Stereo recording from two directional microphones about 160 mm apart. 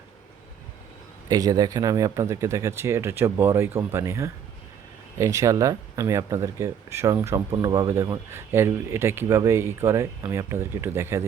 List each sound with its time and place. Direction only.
1.3 s speech: 25° right (ahead or behind)